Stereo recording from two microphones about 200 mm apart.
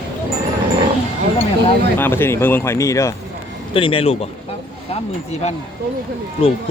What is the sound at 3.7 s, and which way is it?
Speech, 25° left (ahead or behind).